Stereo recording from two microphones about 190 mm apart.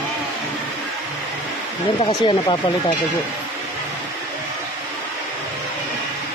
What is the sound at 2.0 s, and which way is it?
Speech, 25° left (ahead or behind).